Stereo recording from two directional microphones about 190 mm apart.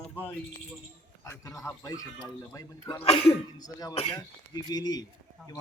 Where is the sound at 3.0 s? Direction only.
30° left (ahead or behind).